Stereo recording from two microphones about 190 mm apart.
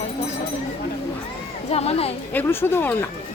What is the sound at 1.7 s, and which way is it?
Speech, 30° left (ahead or behind).